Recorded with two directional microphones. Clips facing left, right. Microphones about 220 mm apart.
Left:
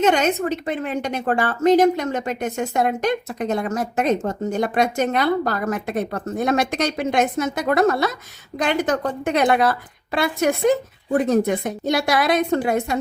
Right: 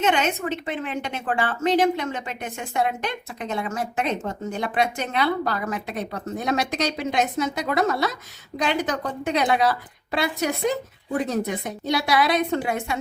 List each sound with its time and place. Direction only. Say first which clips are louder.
0.0 s a woman's voice: left 5 dB; 40° left (ahead or behind)